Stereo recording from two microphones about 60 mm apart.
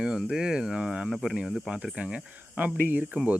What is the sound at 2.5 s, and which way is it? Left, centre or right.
Speech, right.